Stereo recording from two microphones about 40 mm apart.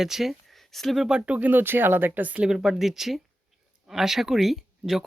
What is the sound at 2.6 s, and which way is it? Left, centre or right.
Speech, centre.